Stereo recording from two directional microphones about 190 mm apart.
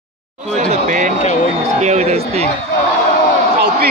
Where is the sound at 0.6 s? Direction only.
40° right (ahead or behind).